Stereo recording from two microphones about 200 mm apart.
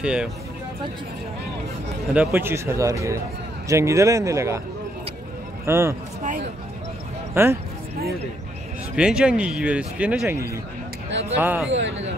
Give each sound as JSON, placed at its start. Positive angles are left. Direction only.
{"t": 0.0, "sound": "speech", "side_deg": -5}
{"t": 2.1, "sound": "speech", "side_deg": -10}
{"t": 5.7, "sound": "speech", "side_deg": -15}
{"t": 7.3, "sound": "speech", "side_deg": -10}
{"t": 8.9, "sound": "speech", "side_deg": -5}
{"t": 11.7, "sound": "speech", "side_deg": -65}